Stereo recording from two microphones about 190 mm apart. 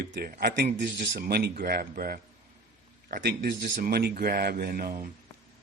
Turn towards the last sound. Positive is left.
turn(degrees=-50)  # may be behind; listen again after turning